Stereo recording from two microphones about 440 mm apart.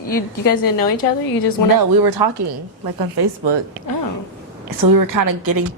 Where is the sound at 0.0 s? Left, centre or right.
Left.